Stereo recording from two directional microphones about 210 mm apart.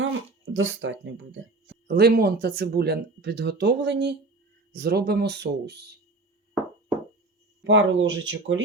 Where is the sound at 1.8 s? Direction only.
50° right (ahead or behind).